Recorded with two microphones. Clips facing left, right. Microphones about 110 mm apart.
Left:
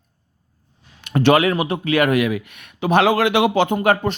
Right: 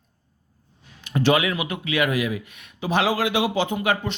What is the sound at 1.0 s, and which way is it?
Speech, 60° left (ahead or behind).